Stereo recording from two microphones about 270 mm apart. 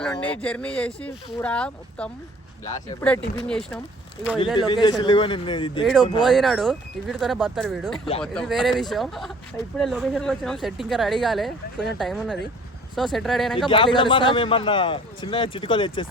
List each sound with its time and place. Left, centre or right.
0.1 s speech: centre
4.5 s a man's voice: centre
5.8 s speech: centre
13.7 s a man's voice: centre